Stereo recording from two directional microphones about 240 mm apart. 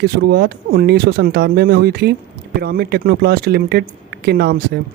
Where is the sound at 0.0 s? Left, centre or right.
Right.